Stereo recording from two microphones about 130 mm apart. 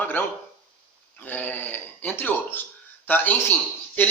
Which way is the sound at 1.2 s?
15° left (ahead or behind).